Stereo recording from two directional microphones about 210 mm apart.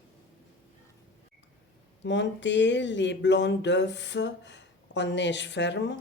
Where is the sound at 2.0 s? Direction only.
60° left (ahead or behind).